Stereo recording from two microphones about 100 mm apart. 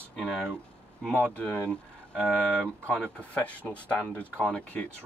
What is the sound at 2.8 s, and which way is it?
Speech, 10° left (ahead or behind).